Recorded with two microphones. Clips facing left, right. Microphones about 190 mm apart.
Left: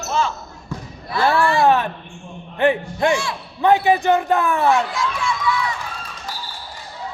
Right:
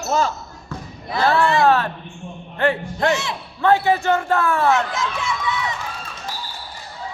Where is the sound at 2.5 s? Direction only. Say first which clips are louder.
Left 3 dB; 15° left (ahead or behind).